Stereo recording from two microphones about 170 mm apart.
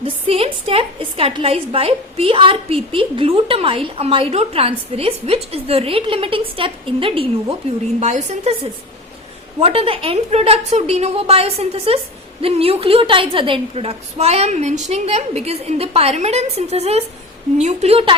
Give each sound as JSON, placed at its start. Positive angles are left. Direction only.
{"t": 0.0, "sound": "a woman's voice", "side_deg": -35}
{"t": 9.6, "sound": "a woman's voice", "side_deg": -35}